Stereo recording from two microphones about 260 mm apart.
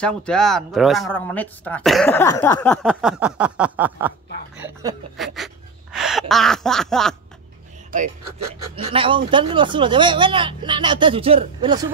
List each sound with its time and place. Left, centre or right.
0.0 s speech: centre
4.6 s a sound: centre
7.9 s speech: right
8.7 s speech: centre